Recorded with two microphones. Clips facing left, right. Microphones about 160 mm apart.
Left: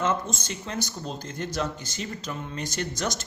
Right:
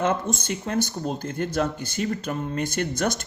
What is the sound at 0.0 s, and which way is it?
Speech, 55° right (ahead or behind).